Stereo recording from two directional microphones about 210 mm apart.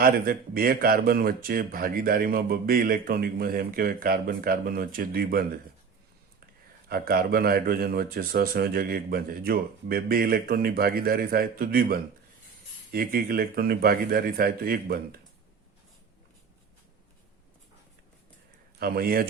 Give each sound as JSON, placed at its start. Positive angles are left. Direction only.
{"t": 0.0, "sound": "speech", "side_deg": -45}
{"t": 6.8, "sound": "speech", "side_deg": -45}
{"t": 18.8, "sound": "speech", "side_deg": -45}